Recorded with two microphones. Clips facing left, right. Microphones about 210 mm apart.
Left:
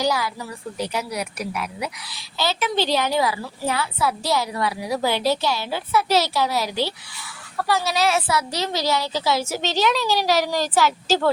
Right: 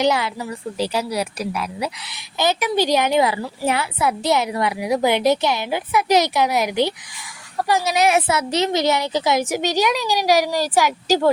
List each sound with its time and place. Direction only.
0.0 s a woman's voice: 25° right (ahead or behind)
2.1 s a woman's voice: 15° right (ahead or behind)